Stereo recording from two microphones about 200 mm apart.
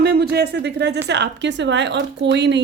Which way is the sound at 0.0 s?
55° right (ahead or behind).